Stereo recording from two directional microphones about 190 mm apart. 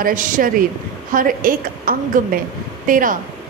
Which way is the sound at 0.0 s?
45° right (ahead or behind).